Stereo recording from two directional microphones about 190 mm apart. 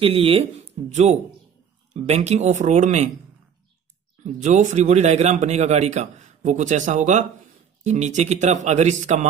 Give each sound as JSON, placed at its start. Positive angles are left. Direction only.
{"t": 0.0, "sound": "speech", "side_deg": -30}
{"t": 4.2, "sound": "speech", "side_deg": -40}